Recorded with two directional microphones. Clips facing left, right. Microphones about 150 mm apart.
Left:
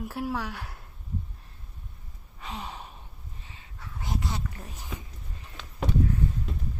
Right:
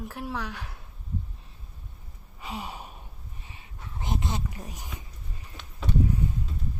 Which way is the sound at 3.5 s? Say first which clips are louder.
Right 1 dB; 20° right (ahead or behind).